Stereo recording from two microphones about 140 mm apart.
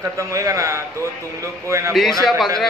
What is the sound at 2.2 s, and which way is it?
Speech, centre (ahead or behind).